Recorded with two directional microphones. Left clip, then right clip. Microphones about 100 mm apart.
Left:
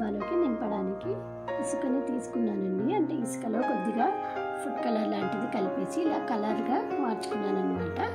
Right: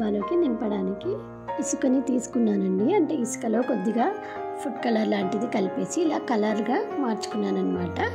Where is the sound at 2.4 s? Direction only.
90° right; by 3.6 s 70° right (ahead or behind).